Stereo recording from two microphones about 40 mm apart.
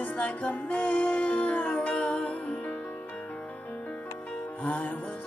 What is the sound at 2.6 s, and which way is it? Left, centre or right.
Music, left.